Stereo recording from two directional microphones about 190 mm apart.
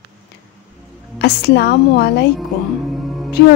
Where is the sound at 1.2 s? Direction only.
60° left (ahead or behind).